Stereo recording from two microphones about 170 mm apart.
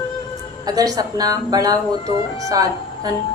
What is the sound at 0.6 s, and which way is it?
A woman's voice, 20° right (ahead or behind).